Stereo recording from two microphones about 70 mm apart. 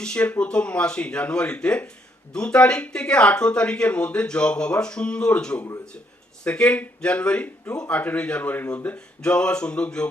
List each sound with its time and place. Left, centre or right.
0.0 s speech: centre
9.2 s speech: centre